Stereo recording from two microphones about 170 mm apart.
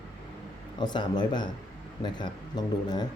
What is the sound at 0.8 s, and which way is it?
Speech, 25° left (ahead or behind).